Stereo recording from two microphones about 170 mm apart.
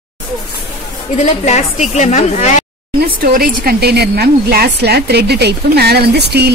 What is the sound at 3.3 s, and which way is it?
A woman's voice, 65° right (ahead or behind).